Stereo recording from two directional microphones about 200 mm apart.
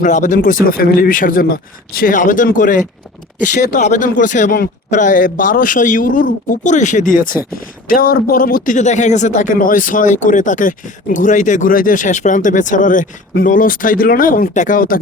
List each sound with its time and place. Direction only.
0.0 s speech: 40° left (ahead or behind)